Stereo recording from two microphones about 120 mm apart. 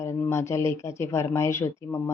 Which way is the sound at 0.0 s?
20° left (ahead or behind).